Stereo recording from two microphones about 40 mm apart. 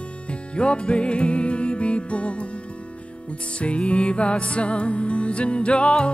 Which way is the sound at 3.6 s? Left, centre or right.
Left.